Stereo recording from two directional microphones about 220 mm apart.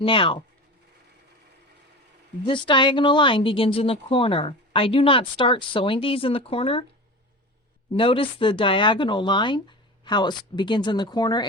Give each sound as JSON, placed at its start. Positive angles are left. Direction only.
{"t": 0.0, "sound": "speech", "side_deg": 25}
{"t": 2.4, "sound": "speech", "side_deg": 20}
{"t": 7.9, "sound": "speech", "side_deg": 25}